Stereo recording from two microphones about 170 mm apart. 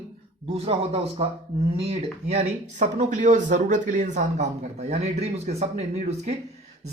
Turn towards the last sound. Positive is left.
turn(degrees=-40)  # may be behind; listen again after turning